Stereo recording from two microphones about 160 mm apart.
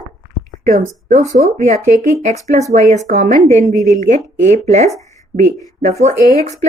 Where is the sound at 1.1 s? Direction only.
45° right (ahead or behind).